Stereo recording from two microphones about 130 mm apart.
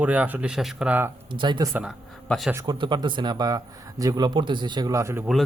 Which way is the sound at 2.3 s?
Centre (ahead or behind).